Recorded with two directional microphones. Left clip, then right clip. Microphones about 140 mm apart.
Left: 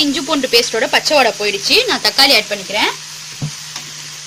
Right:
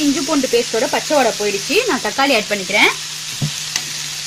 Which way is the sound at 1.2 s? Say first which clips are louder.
Left 2 dB; 35° right (ahead or behind).